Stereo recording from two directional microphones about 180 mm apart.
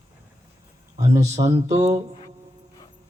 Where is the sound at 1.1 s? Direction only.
40° right (ahead or behind).